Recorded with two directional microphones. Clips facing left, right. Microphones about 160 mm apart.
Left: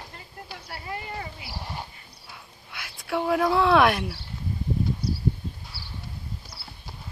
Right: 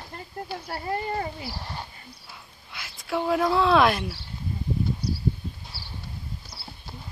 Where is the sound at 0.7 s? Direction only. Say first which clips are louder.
Right 6 dB; 40° right (ahead or behind).